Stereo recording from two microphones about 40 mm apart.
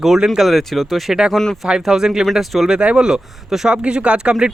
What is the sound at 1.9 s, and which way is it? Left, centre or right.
Speech, centre.